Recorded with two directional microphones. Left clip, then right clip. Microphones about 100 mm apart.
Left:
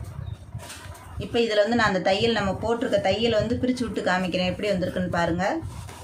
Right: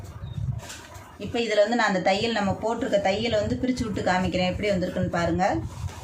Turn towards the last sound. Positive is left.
turn(degrees=40)  # may be behind; listen again after turning